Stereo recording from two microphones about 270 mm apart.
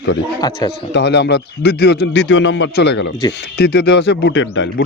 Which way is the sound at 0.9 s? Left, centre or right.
Left.